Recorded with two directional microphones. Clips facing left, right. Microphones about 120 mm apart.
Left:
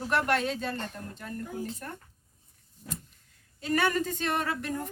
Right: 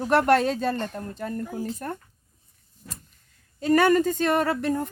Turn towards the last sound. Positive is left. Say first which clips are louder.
# right 8 dB
turn(degrees=-35)  # may be behind; listen again after turning